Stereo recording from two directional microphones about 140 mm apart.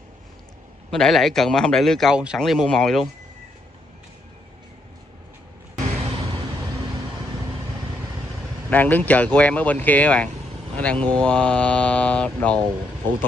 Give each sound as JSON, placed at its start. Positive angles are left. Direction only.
{"t": 0.8, "sound": "a man's voice", "side_deg": 5}
{"t": 6.0, "sound": "vehicle", "side_deg": -40}
{"t": 8.6, "sound": "speech", "side_deg": 10}